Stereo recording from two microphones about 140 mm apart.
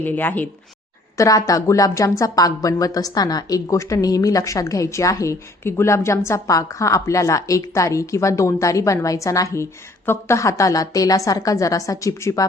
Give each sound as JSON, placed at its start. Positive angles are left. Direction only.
{"t": 0.0, "sound": "speech", "side_deg": 15}